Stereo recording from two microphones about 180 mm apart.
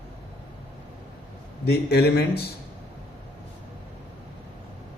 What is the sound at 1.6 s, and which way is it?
Speech, 65° left (ahead or behind).